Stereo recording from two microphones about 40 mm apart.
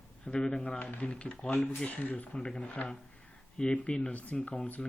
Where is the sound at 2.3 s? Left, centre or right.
Left.